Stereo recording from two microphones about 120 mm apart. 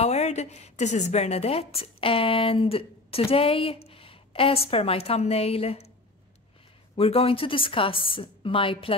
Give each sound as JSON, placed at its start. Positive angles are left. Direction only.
{"t": 0.0, "sound": "a woman's voice", "side_deg": 70}
{"t": 7.0, "sound": "a woman's voice", "side_deg": 55}